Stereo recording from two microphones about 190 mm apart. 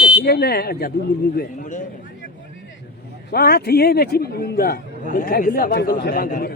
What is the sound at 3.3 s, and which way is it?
A man's voice, 55° left (ahead or behind).